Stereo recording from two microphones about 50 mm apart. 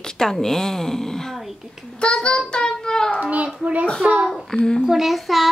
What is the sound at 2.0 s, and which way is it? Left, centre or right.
Child singing, centre.